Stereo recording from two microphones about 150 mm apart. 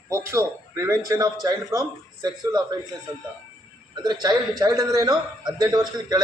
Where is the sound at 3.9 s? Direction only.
25° right (ahead or behind).